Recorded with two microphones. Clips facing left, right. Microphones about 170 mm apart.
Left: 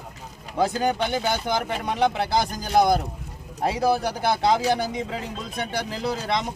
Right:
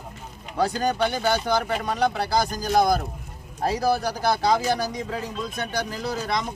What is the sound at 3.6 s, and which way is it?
Speech, 20° left (ahead or behind).